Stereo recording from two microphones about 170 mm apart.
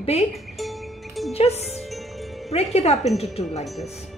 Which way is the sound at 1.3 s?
40° left (ahead or behind).